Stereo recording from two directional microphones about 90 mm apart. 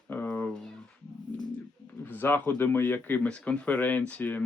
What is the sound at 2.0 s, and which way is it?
Speech, 20° left (ahead or behind).